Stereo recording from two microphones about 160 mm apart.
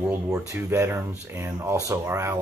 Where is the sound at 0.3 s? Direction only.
15° right (ahead or behind).